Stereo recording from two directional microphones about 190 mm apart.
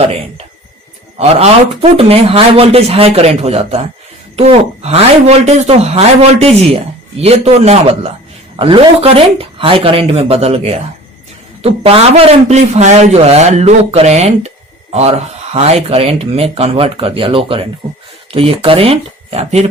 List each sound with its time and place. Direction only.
1.2 s a man's voice: 30° right (ahead or behind)
15.5 s a man's voice: 35° right (ahead or behind)